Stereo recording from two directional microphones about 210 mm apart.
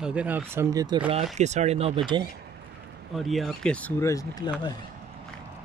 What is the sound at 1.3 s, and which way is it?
Speech, 35° right (ahead or behind).